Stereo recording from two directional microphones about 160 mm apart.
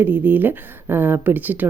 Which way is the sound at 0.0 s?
10° right (ahead or behind).